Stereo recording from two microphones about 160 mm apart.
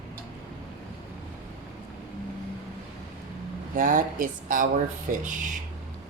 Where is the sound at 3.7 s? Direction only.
55° right (ahead or behind).